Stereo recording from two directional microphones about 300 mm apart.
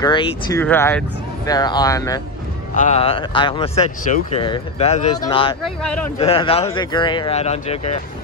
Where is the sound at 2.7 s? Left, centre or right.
Left.